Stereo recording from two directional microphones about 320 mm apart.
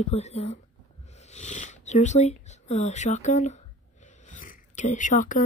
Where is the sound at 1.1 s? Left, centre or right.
Left.